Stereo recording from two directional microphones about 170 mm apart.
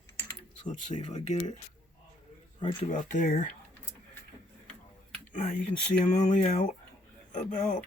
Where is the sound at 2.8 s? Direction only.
50° left (ahead or behind).